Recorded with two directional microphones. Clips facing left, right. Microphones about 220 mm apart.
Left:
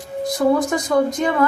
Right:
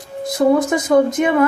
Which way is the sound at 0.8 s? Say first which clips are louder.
Right 5 dB; 20° right (ahead or behind).